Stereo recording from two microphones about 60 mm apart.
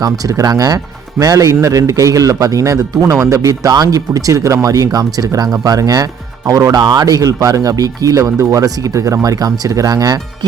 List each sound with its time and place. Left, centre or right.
0.0 s speech: right
1.2 s a man's voice: right